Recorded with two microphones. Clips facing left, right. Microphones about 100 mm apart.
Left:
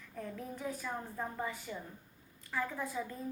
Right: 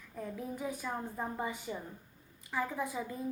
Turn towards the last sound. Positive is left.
turn(degrees=-10)  # may be behind; listen again after turning